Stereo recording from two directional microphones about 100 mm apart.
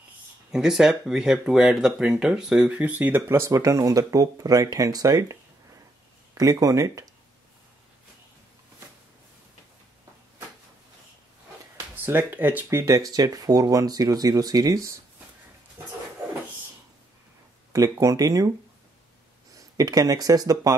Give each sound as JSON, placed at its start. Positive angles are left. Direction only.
{"t": 0.5, "sound": "speech", "side_deg": -5}
{"t": 11.9, "sound": "speech", "side_deg": -20}
{"t": 17.7, "sound": "speech", "side_deg": -35}
{"t": 19.5, "sound": "speech", "side_deg": -35}